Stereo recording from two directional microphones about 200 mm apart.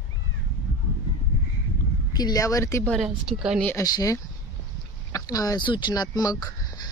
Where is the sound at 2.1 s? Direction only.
20° left (ahead or behind).